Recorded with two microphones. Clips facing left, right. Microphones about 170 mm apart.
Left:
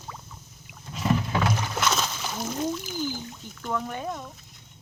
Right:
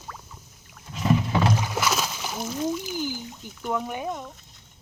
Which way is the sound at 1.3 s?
20° right (ahead or behind).